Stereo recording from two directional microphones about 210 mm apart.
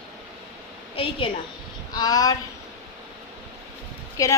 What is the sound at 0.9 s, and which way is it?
Speech, 25° left (ahead or behind).